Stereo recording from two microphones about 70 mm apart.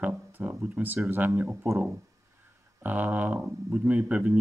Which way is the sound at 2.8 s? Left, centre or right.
Right.